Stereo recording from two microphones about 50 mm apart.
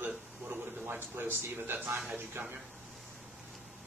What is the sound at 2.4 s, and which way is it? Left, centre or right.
Speech, right.